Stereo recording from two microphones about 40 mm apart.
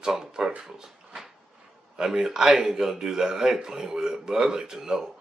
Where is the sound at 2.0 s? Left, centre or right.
Centre.